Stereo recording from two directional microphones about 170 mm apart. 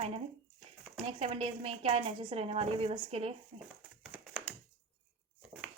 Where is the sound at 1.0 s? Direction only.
35° right (ahead or behind).